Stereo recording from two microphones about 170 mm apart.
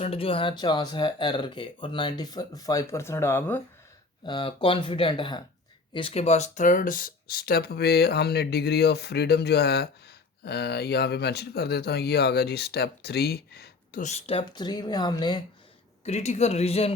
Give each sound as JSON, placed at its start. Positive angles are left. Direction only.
{"t": 0.0, "sound": "speech", "side_deg": 35}
{"t": 4.3, "sound": "speech", "side_deg": 30}
{"t": 14.0, "sound": "speech", "side_deg": 40}
{"t": 16.0, "sound": "speech", "side_deg": 40}